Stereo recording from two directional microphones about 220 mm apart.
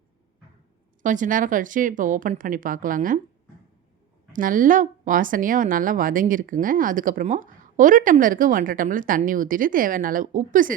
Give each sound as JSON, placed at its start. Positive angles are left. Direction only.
{"t": 1.0, "sound": "a woman's voice", "side_deg": -35}
{"t": 4.3, "sound": "a woman's voice", "side_deg": -40}